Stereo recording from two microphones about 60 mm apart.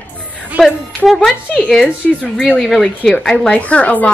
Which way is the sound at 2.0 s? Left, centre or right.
Left.